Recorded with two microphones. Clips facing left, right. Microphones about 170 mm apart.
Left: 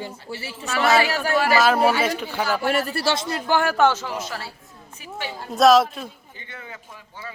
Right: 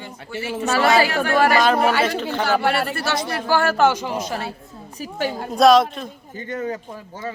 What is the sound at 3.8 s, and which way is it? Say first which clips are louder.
Speech: right 2 dB; 15° right (ahead or behind).